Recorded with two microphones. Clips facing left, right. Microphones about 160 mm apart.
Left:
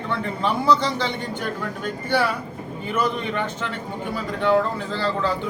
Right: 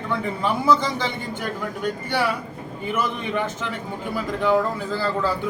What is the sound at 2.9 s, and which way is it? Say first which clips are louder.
A man's voice: left 1 dB; 10° right (ahead or behind).